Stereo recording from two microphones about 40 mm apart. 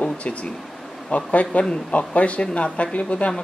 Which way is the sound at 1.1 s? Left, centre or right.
Left.